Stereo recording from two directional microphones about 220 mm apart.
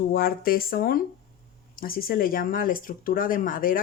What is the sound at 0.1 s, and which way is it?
Speech, 40° left (ahead or behind).